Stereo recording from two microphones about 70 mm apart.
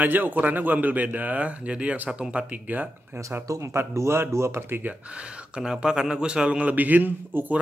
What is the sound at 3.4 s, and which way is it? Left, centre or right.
Speech, right.